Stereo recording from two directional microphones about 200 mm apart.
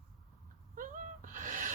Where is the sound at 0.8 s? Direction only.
40° right (ahead or behind).